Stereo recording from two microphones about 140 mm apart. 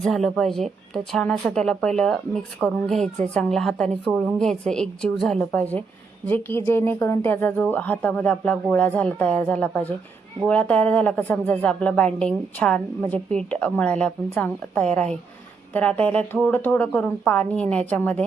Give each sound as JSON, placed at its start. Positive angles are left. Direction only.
{"t": 0.0, "sound": "a woman's voice", "side_deg": 5}